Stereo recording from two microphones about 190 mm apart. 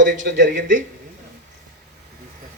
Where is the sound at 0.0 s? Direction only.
40° right (ahead or behind).